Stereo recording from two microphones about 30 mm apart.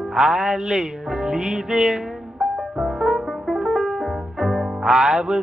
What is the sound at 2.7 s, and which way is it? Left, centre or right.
Brass instrument, right.